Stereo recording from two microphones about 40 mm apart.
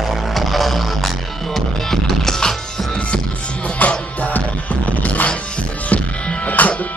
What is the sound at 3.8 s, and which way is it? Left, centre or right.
Music, left.